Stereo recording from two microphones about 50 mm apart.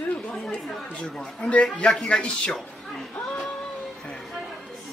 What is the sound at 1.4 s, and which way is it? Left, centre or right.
Speech, left.